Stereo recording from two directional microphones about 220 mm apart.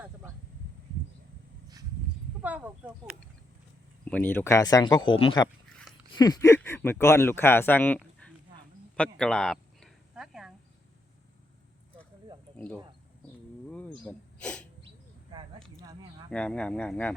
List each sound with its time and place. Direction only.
2.4 s speech: 5° right (ahead or behind)
4.0 s speech: 5° left (ahead or behind)
9.0 s a sound: 5° left (ahead or behind)
12.5 s speech: 5° left (ahead or behind)
13.7 s a sound: 5° left (ahead or behind)
16.3 s speech: 5° left (ahead or behind)